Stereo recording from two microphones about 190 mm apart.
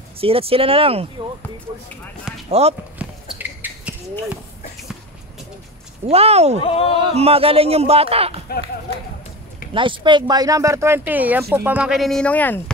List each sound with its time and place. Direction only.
0.2 s speech: 30° right (ahead or behind)
2.3 s speech: 5° right (ahead or behind)
3.0 s a sound: 10° right (ahead or behind)
6.0 s speech: 30° right (ahead or behind)
6.6 s speech: 30° left (ahead or behind)
7.0 s speech: 30° right (ahead or behind)
8.5 s speech: 55° left (ahead or behind)
9.8 s speech: 25° right (ahead or behind); by 12.7 s 10° left (ahead or behind)